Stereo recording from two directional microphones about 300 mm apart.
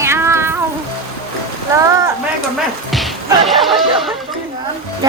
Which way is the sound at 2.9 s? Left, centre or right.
Centre.